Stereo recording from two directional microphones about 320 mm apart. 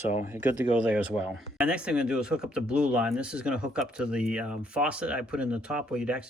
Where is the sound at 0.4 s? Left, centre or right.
Centre.